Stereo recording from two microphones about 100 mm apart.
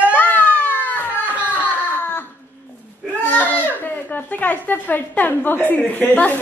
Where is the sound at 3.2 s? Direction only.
20° left (ahead or behind).